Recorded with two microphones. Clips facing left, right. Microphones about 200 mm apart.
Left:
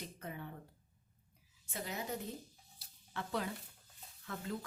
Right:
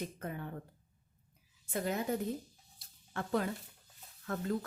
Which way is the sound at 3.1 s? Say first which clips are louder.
Right 6 dB; 50° right (ahead or behind).